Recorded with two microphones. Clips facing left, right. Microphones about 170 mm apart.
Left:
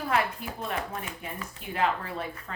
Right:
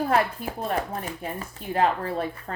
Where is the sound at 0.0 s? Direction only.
40° right (ahead or behind).